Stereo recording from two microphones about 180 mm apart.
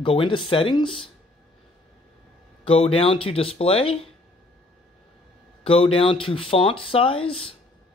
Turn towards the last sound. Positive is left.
turn(degrees=30)  # may be behind; listen again after turning